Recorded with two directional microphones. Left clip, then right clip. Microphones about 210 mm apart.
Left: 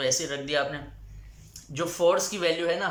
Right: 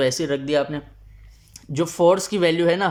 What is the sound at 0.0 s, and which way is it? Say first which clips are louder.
Speech: right 6 dB; 35° right (ahead or behind).